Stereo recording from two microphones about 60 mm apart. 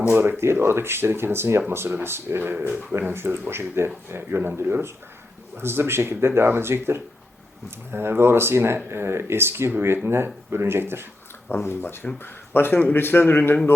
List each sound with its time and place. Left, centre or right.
0.1 s speech: right
11.4 s speech: left